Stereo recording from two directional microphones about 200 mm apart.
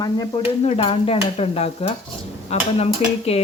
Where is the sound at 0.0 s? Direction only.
20° left (ahead or behind).